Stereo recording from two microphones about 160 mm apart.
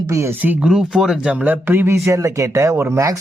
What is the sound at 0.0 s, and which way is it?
Speech, 20° right (ahead or behind).